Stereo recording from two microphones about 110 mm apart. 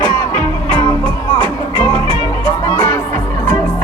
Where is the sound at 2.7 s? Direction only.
20° left (ahead or behind).